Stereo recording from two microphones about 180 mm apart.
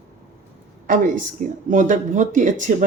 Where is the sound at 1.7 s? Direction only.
45° right (ahead or behind).